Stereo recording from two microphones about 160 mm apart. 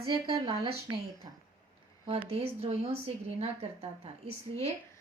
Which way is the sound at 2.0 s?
35° right (ahead or behind).